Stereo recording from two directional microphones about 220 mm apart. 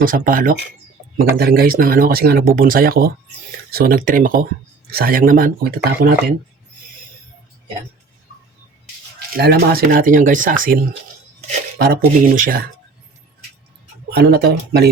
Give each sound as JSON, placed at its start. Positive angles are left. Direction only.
{"t": 0.0, "sound": "speech", "side_deg": -40}
{"t": 9.1, "sound": "speech", "side_deg": -45}
{"t": 11.8, "sound": "speech", "side_deg": -40}
{"t": 14.1, "sound": "speech", "side_deg": -45}